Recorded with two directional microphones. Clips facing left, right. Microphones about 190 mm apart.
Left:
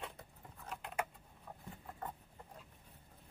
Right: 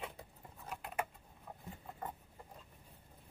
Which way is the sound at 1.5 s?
10° right (ahead or behind).